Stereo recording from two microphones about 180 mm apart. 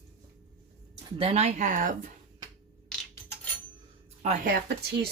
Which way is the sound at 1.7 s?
50° right (ahead or behind).